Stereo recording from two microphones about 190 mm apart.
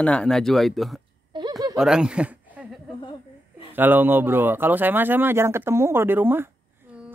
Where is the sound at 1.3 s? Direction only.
25° right (ahead or behind).